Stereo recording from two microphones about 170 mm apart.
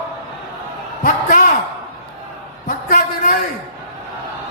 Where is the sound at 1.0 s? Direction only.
55° left (ahead or behind).